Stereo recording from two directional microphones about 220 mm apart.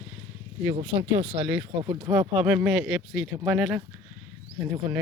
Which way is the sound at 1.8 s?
20° right (ahead or behind).